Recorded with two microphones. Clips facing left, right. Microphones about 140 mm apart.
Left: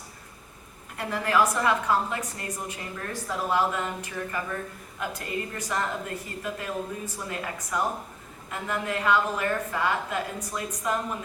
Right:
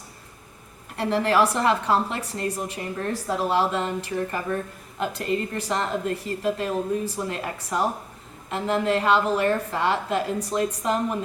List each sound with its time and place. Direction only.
0.9 s a woman's voice: 30° right (ahead or behind)
8.4 s a woman's voice: 30° right (ahead or behind)